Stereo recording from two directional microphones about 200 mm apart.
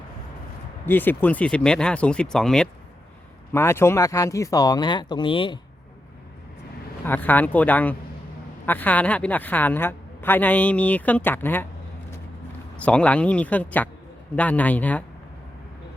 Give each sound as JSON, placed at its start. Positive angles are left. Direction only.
{"t": 0.9, "sound": "a woman's voice", "side_deg": 10}
{"t": 7.0, "sound": "a woman's voice", "side_deg": 10}
{"t": 12.7, "sound": "a woman's voice", "side_deg": 5}